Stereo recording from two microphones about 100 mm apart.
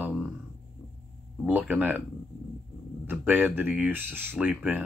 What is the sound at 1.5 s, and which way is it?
Speech, 15° right (ahead or behind).